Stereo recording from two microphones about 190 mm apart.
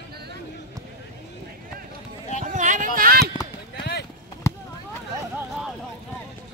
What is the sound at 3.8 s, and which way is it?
Run, 60° left (ahead or behind).